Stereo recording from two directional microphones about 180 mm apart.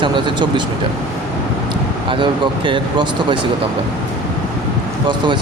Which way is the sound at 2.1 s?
25° right (ahead or behind).